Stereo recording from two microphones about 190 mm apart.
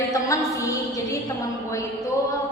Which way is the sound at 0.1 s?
15° left (ahead or behind).